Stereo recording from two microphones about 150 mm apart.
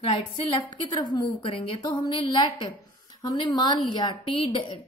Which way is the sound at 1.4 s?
40° left (ahead or behind).